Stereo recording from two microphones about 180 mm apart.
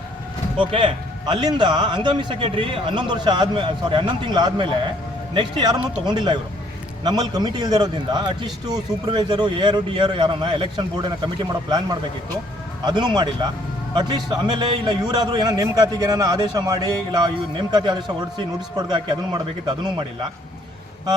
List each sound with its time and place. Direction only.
0.6 s a man's voice: 30° right (ahead or behind)